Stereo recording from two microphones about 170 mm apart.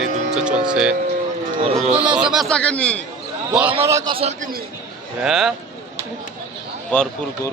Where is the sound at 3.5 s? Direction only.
10° right (ahead or behind).